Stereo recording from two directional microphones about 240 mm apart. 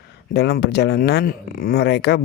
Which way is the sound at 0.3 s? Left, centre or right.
Left.